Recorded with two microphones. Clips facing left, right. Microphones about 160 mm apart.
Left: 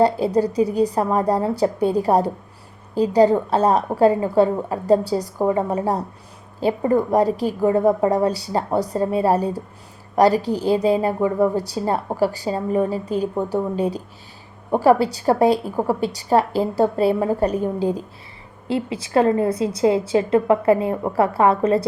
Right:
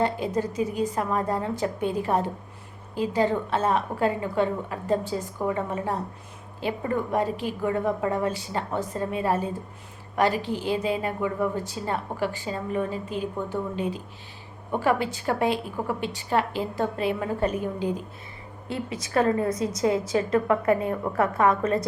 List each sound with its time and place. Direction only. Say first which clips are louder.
0.0 s a woman's voice: left 8 dB; 35° left (ahead or behind)
18.7 s a woman's voice: left 7 dB; 30° left (ahead or behind)